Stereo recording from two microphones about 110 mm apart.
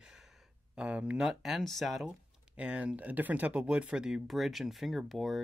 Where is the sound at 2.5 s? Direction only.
15° right (ahead or behind).